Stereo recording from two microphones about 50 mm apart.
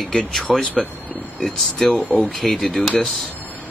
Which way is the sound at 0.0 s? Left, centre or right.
Centre.